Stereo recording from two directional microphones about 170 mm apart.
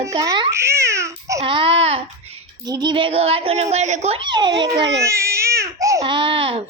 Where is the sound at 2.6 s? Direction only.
25° right (ahead or behind).